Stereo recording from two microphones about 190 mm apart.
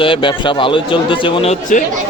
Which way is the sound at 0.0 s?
25° left (ahead or behind).